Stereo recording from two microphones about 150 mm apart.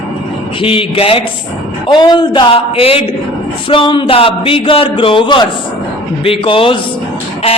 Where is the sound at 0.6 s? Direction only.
35° left (ahead or behind).